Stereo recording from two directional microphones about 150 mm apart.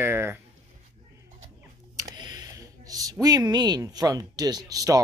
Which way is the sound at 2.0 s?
25° right (ahead or behind).